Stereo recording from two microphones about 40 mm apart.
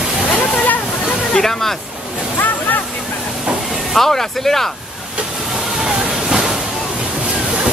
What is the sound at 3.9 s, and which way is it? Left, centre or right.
Speech, centre.